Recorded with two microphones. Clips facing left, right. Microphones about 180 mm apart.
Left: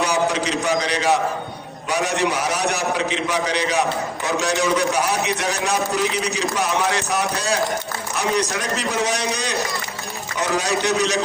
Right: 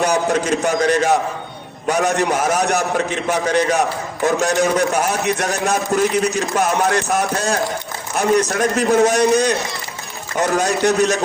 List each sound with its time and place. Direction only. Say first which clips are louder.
0.0 s a man's voice: right 3 dB; 50° right (ahead or behind)